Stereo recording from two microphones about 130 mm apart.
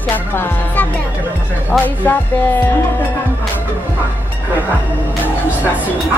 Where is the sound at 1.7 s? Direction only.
5° left (ahead or behind).